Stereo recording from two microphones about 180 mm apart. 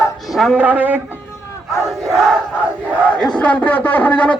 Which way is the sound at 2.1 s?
Centre (ahead or behind).